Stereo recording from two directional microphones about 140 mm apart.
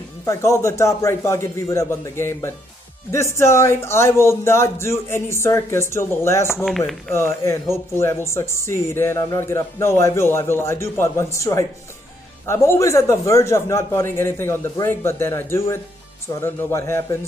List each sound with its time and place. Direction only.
0.2 s a man's voice: 20° left (ahead or behind)